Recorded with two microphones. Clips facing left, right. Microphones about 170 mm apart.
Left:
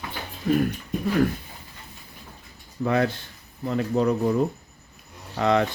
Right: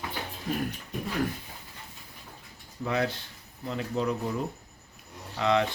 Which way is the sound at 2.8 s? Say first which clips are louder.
Left 6 dB; 55° left (ahead or behind).